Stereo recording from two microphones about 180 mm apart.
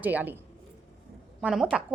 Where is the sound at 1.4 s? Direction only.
5° right (ahead or behind).